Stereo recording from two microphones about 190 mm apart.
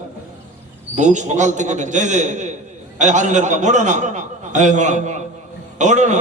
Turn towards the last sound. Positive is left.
turn(degrees=-40)  # may be behind; listen again after turning